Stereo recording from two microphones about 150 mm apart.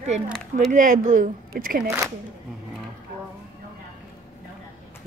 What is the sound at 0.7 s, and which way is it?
Speech, 55° right (ahead or behind).